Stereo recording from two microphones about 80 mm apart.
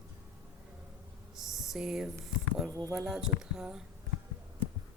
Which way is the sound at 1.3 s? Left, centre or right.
Centre.